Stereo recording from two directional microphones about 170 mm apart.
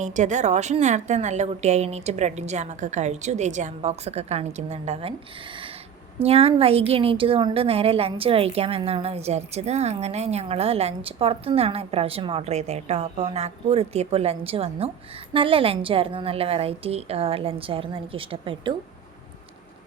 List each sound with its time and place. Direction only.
0.0 s a woman's voice: 45° right (ahead or behind)
6.2 s a woman's voice: 35° right (ahead or behind)